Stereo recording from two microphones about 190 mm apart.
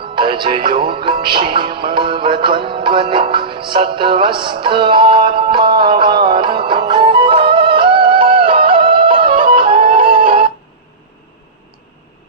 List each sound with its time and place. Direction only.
0.2 s music: 25° right (ahead or behind)
10.0 s music: 50° right (ahead or behind)